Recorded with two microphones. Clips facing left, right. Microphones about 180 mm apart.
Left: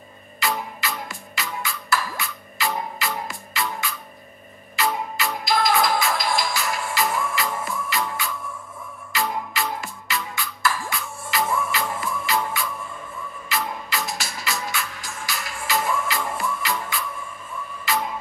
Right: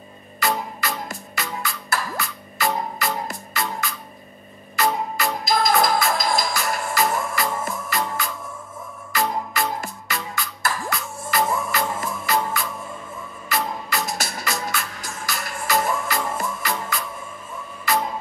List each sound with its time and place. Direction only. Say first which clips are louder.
0.4 s music: right 2 dB; 45° right (ahead or behind)
4.7 s music: right 2 dB; 40° right (ahead or behind)
9.1 s music: right 2 dB; 45° right (ahead or behind)